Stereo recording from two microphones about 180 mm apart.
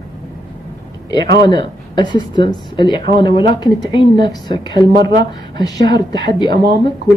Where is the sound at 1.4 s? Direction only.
25° left (ahead or behind).